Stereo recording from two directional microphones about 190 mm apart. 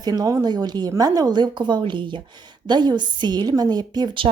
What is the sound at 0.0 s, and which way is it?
Speech, 20° right (ahead or behind).